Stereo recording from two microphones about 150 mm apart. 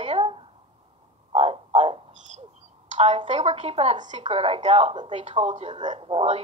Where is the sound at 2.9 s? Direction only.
50° right (ahead or behind).